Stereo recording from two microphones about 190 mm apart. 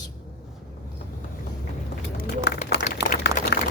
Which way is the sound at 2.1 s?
55° left (ahead or behind).